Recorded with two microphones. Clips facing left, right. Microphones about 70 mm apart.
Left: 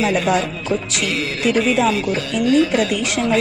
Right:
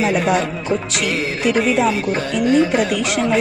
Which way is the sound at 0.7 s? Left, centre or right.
Centre.